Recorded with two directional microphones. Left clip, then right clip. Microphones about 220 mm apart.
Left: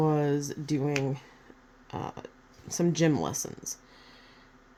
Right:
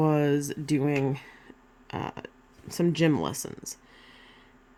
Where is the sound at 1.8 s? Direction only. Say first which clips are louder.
Right 2 dB; 30° right (ahead or behind).